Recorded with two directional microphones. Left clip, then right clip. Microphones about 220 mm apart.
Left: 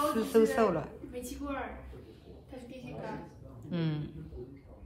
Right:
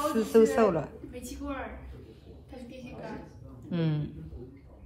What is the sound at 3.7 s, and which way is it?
Speech, 5° left (ahead or behind).